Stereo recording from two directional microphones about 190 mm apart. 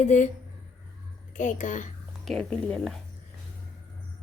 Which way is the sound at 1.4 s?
40° left (ahead or behind).